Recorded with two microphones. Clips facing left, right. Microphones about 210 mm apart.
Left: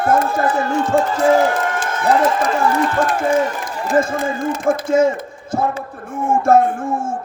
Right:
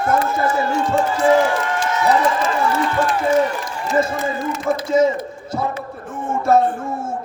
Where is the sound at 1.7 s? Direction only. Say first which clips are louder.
Even; 50° left (ahead or behind).